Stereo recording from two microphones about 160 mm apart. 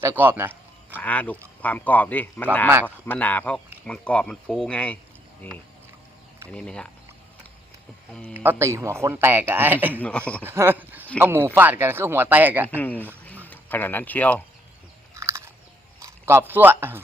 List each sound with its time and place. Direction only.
0.0 s speech: 15° right (ahead or behind)
0.9 s speech: 10° left (ahead or behind)
8.4 s speech: 15° right (ahead or behind)
10.0 s speech: 10° left (ahead or behind)
10.4 s a sound: 15° right (ahead or behind)
11.2 s speech: 15° right (ahead or behind)
12.6 s speech: 10° left (ahead or behind)
13.2 s a sound: 10° left (ahead or behind)
15.1 s a sound: 20° right (ahead or behind)
16.0 s speech: 15° right (ahead or behind)